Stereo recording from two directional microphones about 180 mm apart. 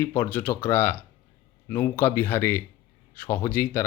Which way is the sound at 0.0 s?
10° left (ahead or behind).